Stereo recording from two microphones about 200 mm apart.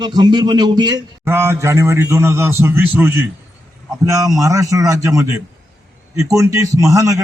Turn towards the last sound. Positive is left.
turn(degrees=-15)  # may be behind; listen again after turning